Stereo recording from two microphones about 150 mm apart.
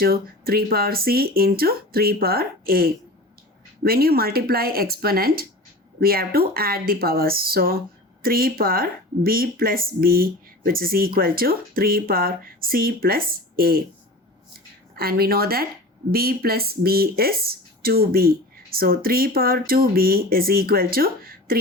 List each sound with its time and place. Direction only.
0.0 s speech: 90° right
3.8 s speech: 90° right
14.9 s speech: 90° right